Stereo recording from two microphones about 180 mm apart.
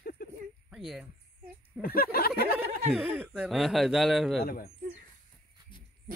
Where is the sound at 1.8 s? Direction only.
55° left (ahead or behind).